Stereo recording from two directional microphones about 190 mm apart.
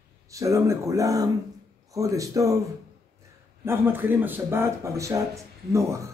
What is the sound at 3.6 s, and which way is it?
A man's voice, 10° right (ahead or behind).